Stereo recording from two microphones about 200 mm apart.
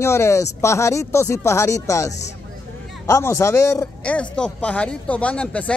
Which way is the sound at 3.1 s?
15° left (ahead or behind).